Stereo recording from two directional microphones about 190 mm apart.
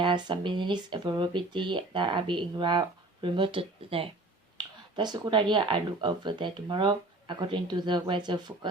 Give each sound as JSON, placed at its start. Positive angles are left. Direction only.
{"t": 0.0, "sound": "speech", "side_deg": -25}